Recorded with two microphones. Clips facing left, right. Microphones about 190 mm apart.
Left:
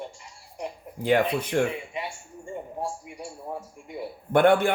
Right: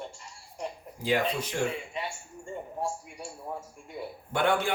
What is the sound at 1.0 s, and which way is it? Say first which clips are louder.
Speech: left 5 dB; 55° left (ahead or behind).